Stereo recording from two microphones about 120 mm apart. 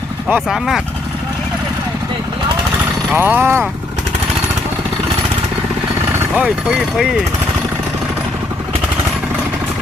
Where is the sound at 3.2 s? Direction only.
20° right (ahead or behind).